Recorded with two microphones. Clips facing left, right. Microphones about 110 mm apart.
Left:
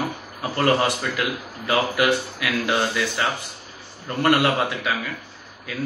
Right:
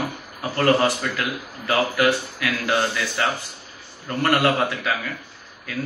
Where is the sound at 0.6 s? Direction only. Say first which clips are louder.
Right 1 dB; 20° left (ahead or behind).